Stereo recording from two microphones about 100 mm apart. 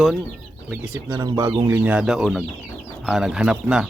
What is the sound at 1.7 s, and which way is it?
Speech, 25° right (ahead or behind).